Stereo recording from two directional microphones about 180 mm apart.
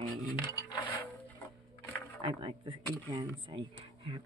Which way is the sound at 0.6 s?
20° left (ahead or behind).